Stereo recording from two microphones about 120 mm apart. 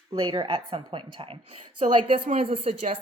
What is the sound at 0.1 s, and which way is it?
A woman's voice, 45° right (ahead or behind).